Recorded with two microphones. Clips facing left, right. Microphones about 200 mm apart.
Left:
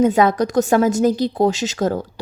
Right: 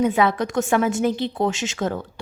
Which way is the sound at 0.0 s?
45° left (ahead or behind).